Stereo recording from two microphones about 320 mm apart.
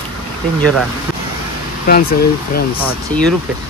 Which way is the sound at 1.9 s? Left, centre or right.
Left.